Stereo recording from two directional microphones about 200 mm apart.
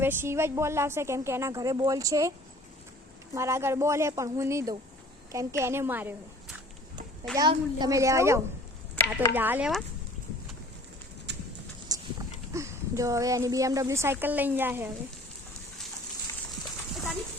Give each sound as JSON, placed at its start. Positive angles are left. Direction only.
{"t": 0.0, "sound": "a woman's voice", "side_deg": -10}
{"t": 3.3, "sound": "a woman's voice", "side_deg": -15}
{"t": 11.3, "sound": "horse", "side_deg": -60}
{"t": 11.9, "sound": "livestock", "side_deg": -20}
{"t": 12.5, "sound": "a woman's voice", "side_deg": -15}